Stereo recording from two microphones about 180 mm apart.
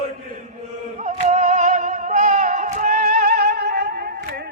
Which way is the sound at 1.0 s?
40° right (ahead or behind).